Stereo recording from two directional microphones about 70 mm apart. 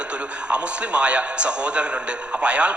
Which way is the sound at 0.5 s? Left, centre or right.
Centre.